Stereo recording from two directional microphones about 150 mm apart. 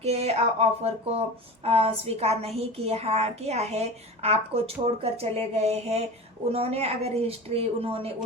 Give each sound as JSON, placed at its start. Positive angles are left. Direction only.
{"t": 0.0, "sound": "a woman's voice", "side_deg": -45}